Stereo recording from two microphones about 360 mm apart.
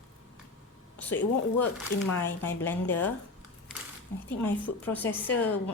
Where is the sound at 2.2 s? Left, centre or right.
Centre.